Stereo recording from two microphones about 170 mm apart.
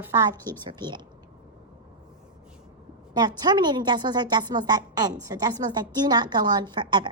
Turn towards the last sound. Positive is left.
turn(degrees=-25)  # may be behind; listen again after turning